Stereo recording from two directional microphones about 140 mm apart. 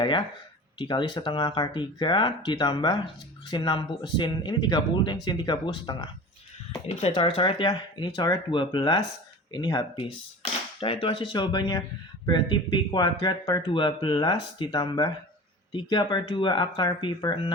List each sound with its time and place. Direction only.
0.8 s speech: 35° left (ahead or behind)
6.7 s speech: 45° left (ahead or behind)